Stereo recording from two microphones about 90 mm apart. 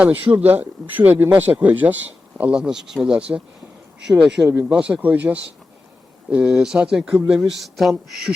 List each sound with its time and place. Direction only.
0.0 s speech: 20° right (ahead or behind); by 8.3 s centre (ahead or behind)